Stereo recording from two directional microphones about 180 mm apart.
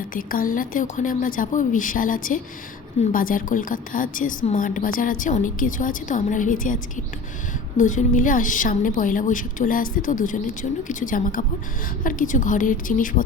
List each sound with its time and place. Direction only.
0.1 s a woman's voice: 50° left (ahead or behind)